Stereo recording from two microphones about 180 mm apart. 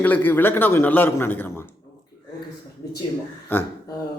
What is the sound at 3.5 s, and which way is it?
Speech, 10° left (ahead or behind).